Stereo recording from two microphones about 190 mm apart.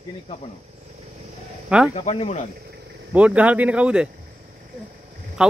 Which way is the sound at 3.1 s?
5° right (ahead or behind).